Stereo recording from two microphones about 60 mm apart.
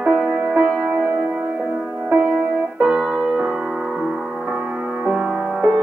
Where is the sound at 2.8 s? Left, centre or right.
Centre.